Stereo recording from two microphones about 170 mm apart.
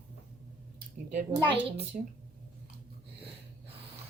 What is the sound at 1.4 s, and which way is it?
Speech, 30° right (ahead or behind).